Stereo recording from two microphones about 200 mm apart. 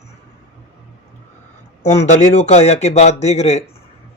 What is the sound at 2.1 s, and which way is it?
Speech, 35° left (ahead or behind).